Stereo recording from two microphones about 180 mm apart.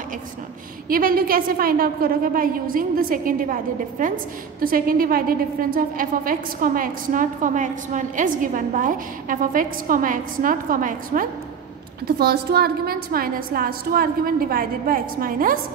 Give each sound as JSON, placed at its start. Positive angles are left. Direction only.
{"t": 0.8, "sound": "a woman's voice", "side_deg": -55}
{"t": 12.2, "sound": "a woman's voice", "side_deg": -60}